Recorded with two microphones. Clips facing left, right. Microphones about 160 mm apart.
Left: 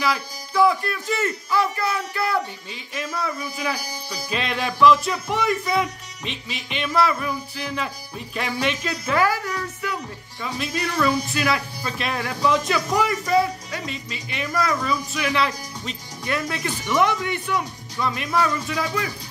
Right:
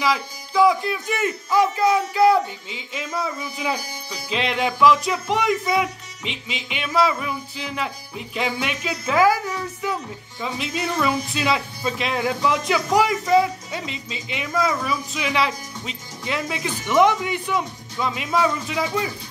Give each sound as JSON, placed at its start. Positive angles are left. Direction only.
{"t": 0.0, "sound": "speech", "side_deg": -15}
{"t": 4.3, "sound": "speech", "side_deg": -15}